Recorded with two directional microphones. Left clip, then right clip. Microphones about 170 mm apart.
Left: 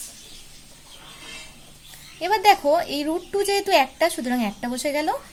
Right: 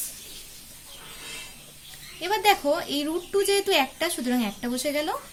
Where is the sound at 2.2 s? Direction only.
40° left (ahead or behind).